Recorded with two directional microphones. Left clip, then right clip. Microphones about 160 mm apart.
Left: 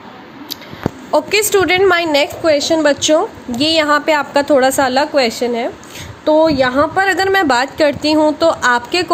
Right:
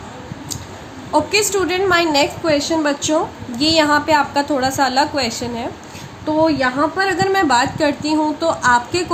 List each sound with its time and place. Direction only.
1.1 s a woman's voice: 50° left (ahead or behind)
6.2 s a woman's voice: 50° left (ahead or behind)